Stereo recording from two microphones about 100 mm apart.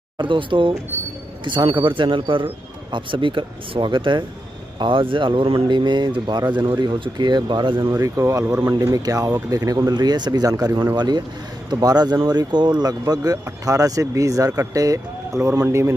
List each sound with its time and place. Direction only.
0.2 s speech: 55° right (ahead or behind)
7.9 s speech: 30° right (ahead or behind)
11.0 s speech: 45° right (ahead or behind); by 15.9 s 25° right (ahead or behind)